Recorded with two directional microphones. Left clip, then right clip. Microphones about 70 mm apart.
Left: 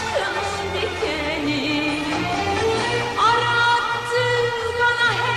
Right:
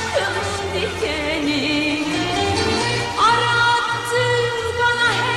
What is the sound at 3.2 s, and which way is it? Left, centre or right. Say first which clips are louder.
Music: right 2 dB; right.